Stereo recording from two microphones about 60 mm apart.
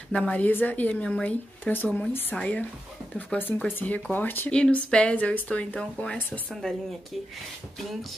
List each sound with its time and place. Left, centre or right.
0.1 s speech: left
1.0 s speech: centre
1.6 s speech: left
2.3 s speech: left
3.6 s speech: left
4.5 s speech: centre
6.6 s speech: centre